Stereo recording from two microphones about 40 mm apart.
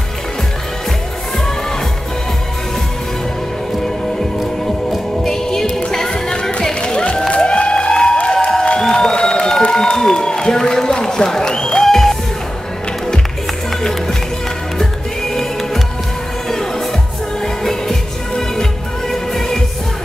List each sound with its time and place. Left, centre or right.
4.6 s music: centre
8.6 s a sound: left
14.8 s music: centre
17.6 s music: centre